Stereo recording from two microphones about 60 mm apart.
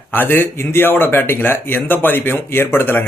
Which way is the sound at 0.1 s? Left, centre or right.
Left.